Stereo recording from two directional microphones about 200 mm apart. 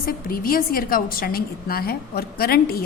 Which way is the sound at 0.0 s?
45° left (ahead or behind).